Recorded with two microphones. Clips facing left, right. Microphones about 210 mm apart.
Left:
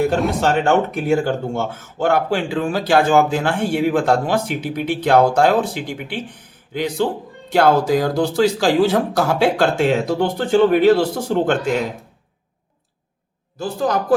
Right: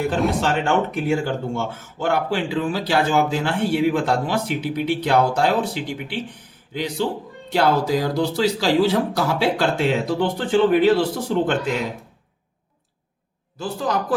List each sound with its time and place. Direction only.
0.2 s speech: centre (ahead or behind)
0.4 s speech: 45° left (ahead or behind)
13.6 s speech: 45° left (ahead or behind)